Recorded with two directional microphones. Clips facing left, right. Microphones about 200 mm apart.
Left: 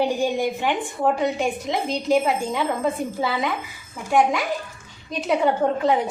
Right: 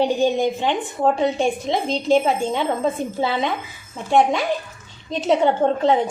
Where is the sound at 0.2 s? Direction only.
20° right (ahead or behind).